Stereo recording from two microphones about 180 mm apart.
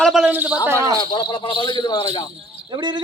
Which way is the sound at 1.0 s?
25° left (ahead or behind).